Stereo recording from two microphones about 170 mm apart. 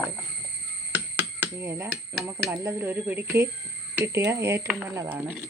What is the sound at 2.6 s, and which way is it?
Speech, 15° right (ahead or behind).